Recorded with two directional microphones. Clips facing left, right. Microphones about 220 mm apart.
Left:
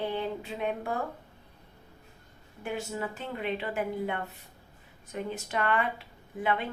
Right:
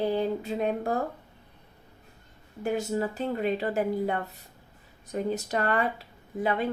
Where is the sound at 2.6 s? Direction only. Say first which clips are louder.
Right 6 dB; 40° right (ahead or behind).